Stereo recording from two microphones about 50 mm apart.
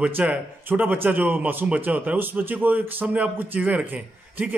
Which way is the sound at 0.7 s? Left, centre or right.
Right.